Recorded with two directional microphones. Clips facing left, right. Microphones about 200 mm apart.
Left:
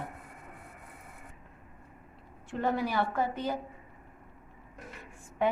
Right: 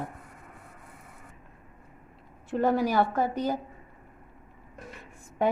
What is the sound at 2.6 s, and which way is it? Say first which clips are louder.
A woman's voice: right 6 dB; 40° right (ahead or behind).